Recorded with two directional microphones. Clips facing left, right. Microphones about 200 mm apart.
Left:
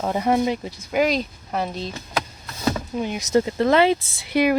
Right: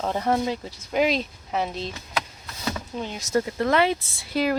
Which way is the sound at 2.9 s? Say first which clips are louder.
Left 4 dB; 15° left (ahead or behind).